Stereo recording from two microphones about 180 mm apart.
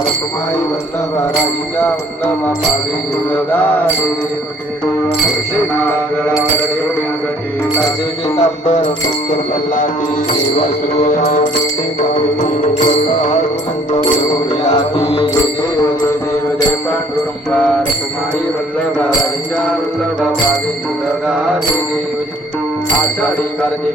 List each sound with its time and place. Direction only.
8.4 s music: 40° left (ahead or behind)
11.0 s music: 45° left (ahead or behind)
14.6 s music: 35° left (ahead or behind)